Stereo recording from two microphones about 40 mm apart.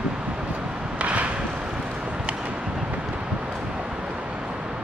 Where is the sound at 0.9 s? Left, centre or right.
Right.